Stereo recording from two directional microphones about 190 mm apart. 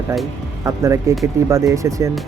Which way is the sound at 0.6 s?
15° right (ahead or behind).